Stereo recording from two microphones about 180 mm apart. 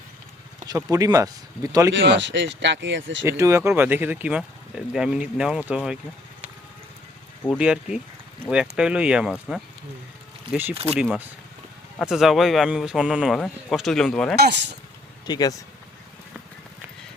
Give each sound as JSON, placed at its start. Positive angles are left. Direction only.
{"t": 0.9, "sound": "speech", "side_deg": -20}
{"t": 1.9, "sound": "speech", "side_deg": -85}
{"t": 3.2, "sound": "speech", "side_deg": -15}
{"t": 7.6, "sound": "a man's voice", "side_deg": -5}
{"t": 14.3, "sound": "speech", "side_deg": -70}
{"t": 15.3, "sound": "speech", "side_deg": 20}